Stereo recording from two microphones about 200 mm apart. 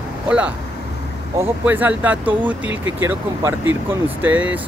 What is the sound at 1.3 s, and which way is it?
Speech, 10° right (ahead or behind).